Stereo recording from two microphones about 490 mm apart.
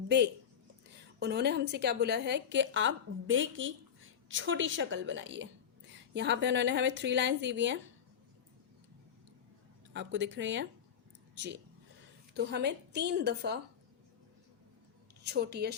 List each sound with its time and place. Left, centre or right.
1.2 s a woman's voice: centre
9.9 s a woman's voice: right
12.3 s a woman's voice: centre
15.2 s a woman's voice: centre